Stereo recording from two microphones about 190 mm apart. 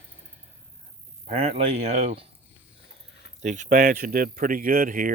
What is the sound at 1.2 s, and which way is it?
Speech, 30° right (ahead or behind).